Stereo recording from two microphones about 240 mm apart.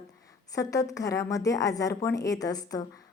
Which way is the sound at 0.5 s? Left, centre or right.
Centre.